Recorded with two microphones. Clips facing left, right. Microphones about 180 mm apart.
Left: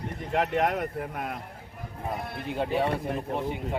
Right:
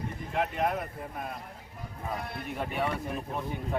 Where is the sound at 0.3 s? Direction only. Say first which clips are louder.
Left 4 dB; 75° left (ahead or behind).